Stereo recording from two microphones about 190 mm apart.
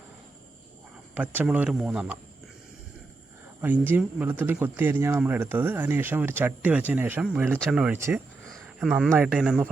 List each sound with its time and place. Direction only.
1.1 s speech: 10° right (ahead or behind)
3.6 s speech: 10° right (ahead or behind)
8.4 s speech: centre (ahead or behind)